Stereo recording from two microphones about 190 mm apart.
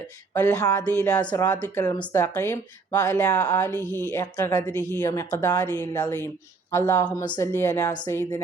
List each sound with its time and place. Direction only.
0.3 s speech: 20° left (ahead or behind)
3.7 s speech: 15° right (ahead or behind)
4.1 s speech: 15° left (ahead or behind)